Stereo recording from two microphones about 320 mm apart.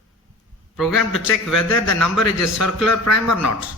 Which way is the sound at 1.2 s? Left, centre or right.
Left.